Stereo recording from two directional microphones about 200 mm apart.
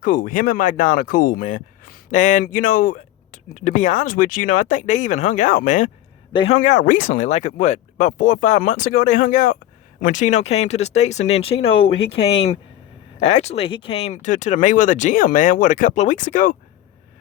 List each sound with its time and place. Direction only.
0.0 s speech: 40° left (ahead or behind)
6.3 s speech: 25° left (ahead or behind)
6.6 s speech: 40° left (ahead or behind)